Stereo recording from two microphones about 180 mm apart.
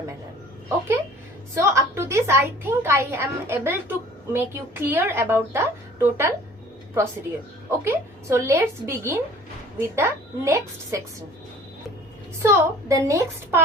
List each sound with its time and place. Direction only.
1.5 s a woman's voice: 15° right (ahead or behind)
7.7 s a woman's voice: 15° right (ahead or behind)
12.4 s a woman's voice: 15° right (ahead or behind)